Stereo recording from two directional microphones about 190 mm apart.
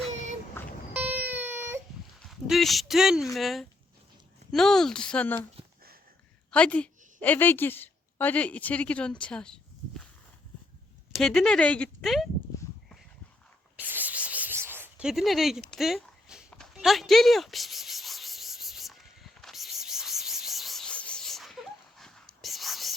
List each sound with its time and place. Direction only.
0.1 s vehicle: 40° right (ahead or behind)
0.6 s vehicle: 10° left (ahead or behind)
0.9 s baby cry: 10° right (ahead or behind)
2.2 s speech: centre (ahead or behind)
6.5 s a woman's voice: 5° left (ahead or behind)
11.1 s speech: centre (ahead or behind)
13.7 s a sound: 10° right (ahead or behind)
16.5 s rub: centre (ahead or behind)